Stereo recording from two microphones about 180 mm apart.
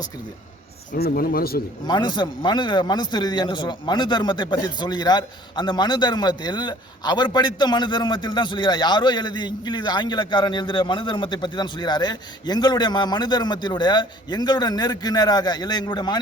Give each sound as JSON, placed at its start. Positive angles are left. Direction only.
{"t": 0.9, "sound": "speech", "side_deg": 55}
{"t": 1.9, "sound": "a man's voice", "side_deg": 25}